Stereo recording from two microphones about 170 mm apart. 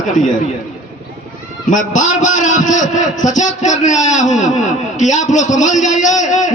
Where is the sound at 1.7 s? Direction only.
50° left (ahead or behind).